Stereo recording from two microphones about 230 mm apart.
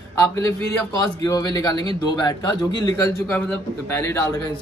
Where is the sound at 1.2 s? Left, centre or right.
Centre.